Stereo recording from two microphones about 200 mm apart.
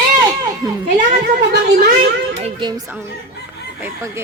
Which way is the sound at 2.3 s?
30° right (ahead or behind).